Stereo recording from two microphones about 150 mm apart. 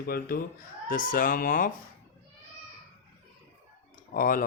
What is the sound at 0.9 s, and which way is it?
Speech, 70° left (ahead or behind).